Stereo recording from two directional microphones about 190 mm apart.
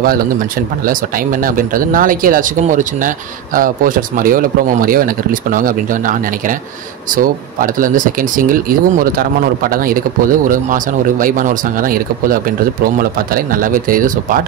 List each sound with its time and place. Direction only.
0.8 s speech: 45° right (ahead or behind)